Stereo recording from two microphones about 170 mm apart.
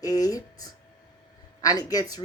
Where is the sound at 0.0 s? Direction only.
20° left (ahead or behind).